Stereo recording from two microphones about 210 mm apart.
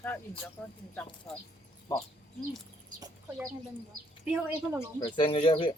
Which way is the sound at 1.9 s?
15° left (ahead or behind).